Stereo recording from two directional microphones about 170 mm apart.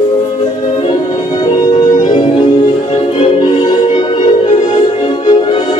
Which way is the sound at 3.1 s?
30° left (ahead or behind).